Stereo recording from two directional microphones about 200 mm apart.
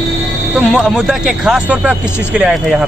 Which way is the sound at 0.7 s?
5° right (ahead or behind).